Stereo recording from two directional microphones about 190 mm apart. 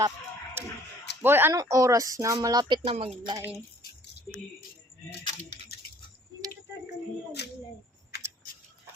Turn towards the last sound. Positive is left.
turn(degrees=60)  # may be behind; listen again after turning